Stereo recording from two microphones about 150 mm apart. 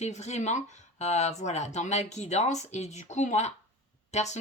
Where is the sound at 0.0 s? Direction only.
50° left (ahead or behind).